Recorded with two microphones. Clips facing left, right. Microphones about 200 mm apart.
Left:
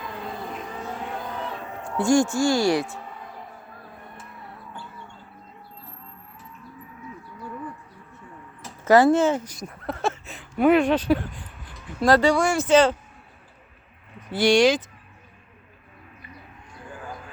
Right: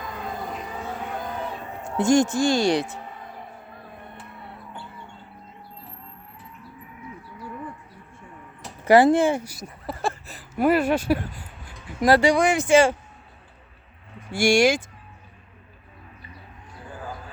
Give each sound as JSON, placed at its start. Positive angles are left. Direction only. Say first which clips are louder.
{"t": 1.8, "sound": "speech", "louder": "right 1 dB", "side_deg": -20}
{"t": 3.7, "sound": "a sound", "louder": "right 1 dB", "side_deg": -25}
{"t": 4.4, "sound": "music", "louder": "even", "side_deg": -25}
{"t": 8.8, "sound": "speech", "louder": "right 1 dB", "side_deg": -15}
{"t": 14.3, "sound": "speech", "louder": "left 1 dB", "side_deg": -10}